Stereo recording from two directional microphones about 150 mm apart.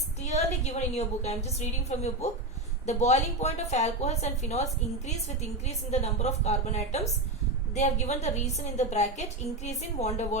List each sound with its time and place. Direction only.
0.2 s a woman's voice: 50° left (ahead or behind)